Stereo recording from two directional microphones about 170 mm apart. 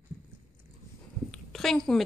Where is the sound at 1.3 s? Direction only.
Centre (ahead or behind).